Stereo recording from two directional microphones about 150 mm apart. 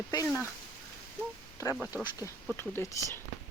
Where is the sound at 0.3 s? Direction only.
15° left (ahead or behind).